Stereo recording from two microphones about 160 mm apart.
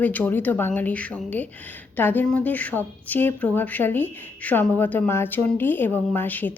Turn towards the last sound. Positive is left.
turn(degrees=10)  # may be behind; listen again after turning